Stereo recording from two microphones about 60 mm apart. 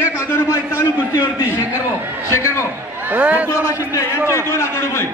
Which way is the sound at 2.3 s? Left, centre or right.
Left.